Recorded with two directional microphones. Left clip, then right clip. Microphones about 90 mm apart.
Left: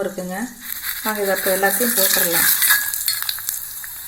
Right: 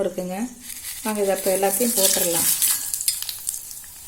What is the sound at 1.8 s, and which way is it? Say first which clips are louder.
Speech: left 2 dB; 20° right (ahead or behind).